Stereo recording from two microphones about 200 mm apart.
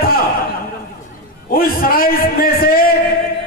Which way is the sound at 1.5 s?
45° left (ahead or behind).